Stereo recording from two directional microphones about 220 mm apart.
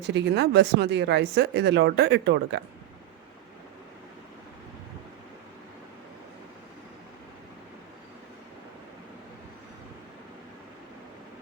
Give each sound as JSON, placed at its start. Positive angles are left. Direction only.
{"t": 0.1, "sound": "speech", "side_deg": -50}